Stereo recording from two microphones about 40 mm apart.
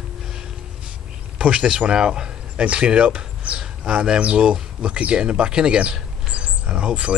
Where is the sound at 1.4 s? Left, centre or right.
Right.